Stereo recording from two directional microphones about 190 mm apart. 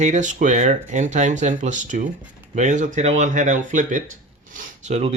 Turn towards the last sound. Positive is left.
turn(degrees=-35)  # may be behind; listen again after turning